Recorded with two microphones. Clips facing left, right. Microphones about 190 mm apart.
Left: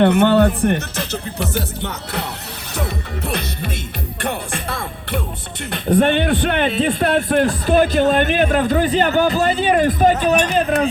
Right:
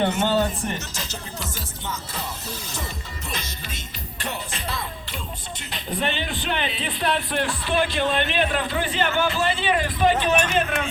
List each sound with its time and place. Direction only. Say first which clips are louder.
0.0 s speech: left 9 dB; 60° left (ahead or behind)
2.7 s music: left 9 dB; 65° left (ahead or behind)
5.7 s speech: left 12 dB; 55° left (ahead or behind); by 10.8 s 35° left (ahead or behind)